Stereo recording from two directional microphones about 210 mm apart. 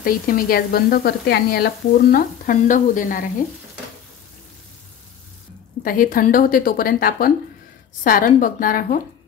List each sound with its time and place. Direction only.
0.0 s speech: 45° left (ahead or behind)
5.8 s a woman's voice: 40° left (ahead or behind)